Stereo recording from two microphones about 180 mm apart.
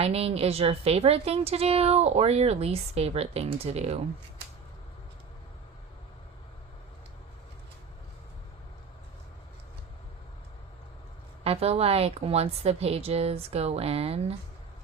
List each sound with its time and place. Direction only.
0.0 s a woman's voice: 35° right (ahead or behind)
11.4 s a woman's voice: 35° right (ahead or behind)